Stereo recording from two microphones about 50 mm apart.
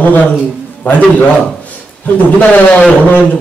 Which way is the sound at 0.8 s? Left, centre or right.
Left.